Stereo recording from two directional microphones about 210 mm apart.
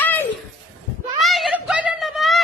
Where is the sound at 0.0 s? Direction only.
10° left (ahead or behind).